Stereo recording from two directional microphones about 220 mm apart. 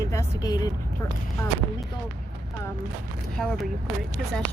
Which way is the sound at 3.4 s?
Centre (ahead or behind).